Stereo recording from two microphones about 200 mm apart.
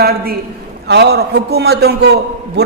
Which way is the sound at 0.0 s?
50° right (ahead or behind).